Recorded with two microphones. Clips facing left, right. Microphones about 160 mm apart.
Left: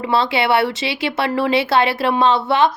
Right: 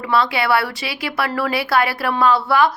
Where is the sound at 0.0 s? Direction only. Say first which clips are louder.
Left 1 dB; 25° left (ahead or behind).